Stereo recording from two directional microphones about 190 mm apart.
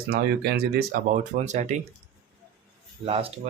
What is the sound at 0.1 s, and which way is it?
Speech, 55° right (ahead or behind).